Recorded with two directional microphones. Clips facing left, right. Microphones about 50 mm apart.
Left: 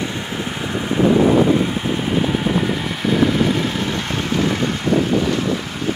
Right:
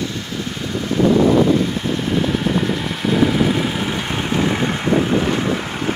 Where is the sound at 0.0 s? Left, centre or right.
Left; by 4.8 s right.